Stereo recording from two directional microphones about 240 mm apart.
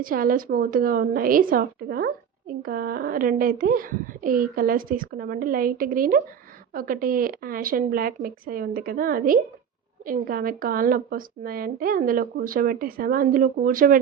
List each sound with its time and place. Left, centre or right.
0.0 s a woman's voice: right